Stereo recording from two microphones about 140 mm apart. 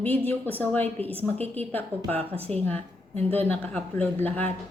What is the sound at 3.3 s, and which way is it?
Speech, 10° left (ahead or behind).